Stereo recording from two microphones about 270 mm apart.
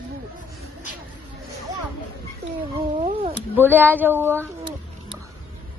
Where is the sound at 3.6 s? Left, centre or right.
Centre.